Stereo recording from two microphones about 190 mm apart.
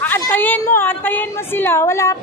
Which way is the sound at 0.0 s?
10° left (ahead or behind).